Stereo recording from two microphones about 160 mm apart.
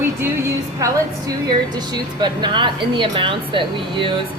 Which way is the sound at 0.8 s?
20° right (ahead or behind).